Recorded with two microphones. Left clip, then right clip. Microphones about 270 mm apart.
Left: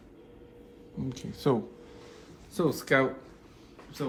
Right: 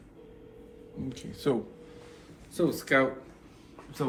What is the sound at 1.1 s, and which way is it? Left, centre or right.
Speech, left.